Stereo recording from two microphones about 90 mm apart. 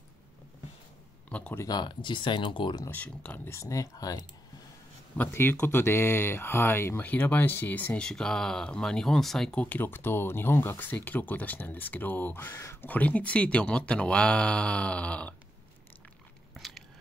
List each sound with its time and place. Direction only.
1.3 s speech: 15° left (ahead or behind)
1.7 s speech: 55° left (ahead or behind)
2.9 s speech: 15° left (ahead or behind)
3.4 s speech: 35° left (ahead or behind)
5.1 s speech: 20° left (ahead or behind)
16.5 s biting: centre (ahead or behind)